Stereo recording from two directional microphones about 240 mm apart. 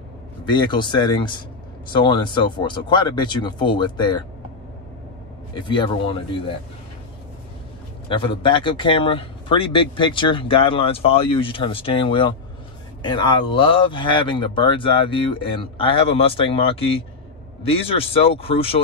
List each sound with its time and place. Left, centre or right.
0.5 s speech: centre
5.7 s speech: left
8.1 s speech: left